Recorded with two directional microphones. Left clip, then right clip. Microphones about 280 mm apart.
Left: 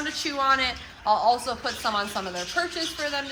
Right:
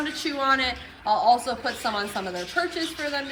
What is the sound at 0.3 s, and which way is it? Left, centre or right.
Speech, centre.